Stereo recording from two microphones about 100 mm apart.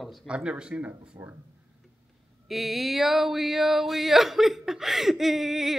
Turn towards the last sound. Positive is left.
turn(degrees=0)  # may be behind; listen again after turning